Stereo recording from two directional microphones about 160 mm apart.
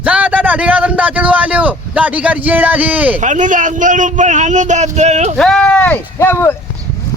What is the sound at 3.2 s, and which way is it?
Speech, 50° right (ahead or behind).